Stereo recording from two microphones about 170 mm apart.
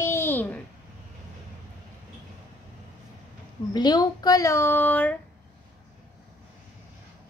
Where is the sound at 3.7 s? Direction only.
25° left (ahead or behind).